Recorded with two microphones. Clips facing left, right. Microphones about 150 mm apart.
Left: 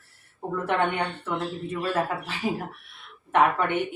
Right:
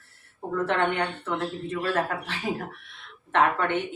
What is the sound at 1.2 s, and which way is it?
Speech, 10° left (ahead or behind).